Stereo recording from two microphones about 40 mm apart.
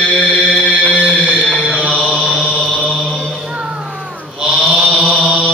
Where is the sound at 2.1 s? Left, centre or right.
Left.